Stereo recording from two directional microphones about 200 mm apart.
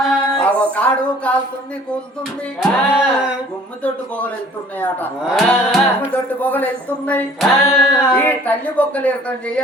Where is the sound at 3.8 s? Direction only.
5° left (ahead or behind).